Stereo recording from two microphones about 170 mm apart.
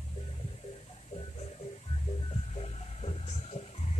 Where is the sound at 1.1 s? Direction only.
35° left (ahead or behind).